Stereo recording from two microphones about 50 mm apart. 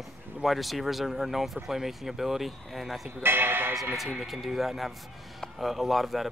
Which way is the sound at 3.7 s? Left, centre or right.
Centre.